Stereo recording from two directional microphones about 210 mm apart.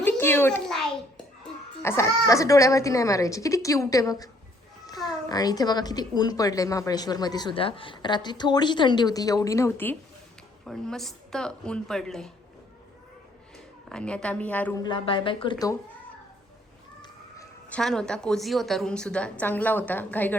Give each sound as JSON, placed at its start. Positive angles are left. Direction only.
{"t": 0.0, "sound": "a sound", "side_deg": 10}
{"t": 1.8, "sound": "a woman's voice", "side_deg": 10}
{"t": 13.9, "sound": "a woman's voice", "side_deg": 5}
{"t": 14.8, "sound": "a woman's voice", "side_deg": 25}
{"t": 17.7, "sound": "a woman's voice", "side_deg": 5}